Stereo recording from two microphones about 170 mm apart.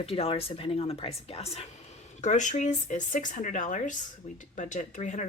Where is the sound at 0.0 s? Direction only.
35° left (ahead or behind).